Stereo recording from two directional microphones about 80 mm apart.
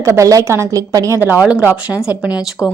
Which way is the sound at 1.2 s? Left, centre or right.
Right.